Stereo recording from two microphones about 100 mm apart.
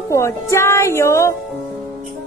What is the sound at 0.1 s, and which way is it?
Speech, 30° left (ahead or behind).